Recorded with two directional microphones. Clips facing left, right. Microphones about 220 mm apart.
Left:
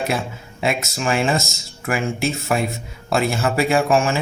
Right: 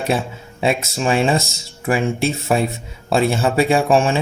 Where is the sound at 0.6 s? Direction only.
30° right (ahead or behind).